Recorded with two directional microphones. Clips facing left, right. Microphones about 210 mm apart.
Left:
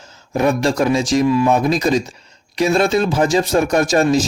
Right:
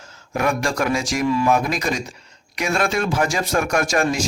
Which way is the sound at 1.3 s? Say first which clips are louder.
Even; 15° left (ahead or behind).